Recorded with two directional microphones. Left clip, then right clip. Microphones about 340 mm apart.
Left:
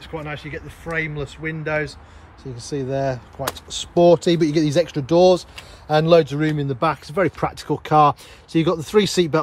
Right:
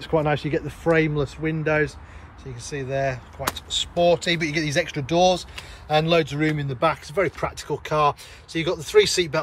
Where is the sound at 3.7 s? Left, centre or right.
Centre.